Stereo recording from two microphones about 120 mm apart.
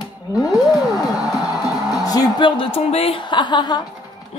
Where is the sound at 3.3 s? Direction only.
40° left (ahead or behind).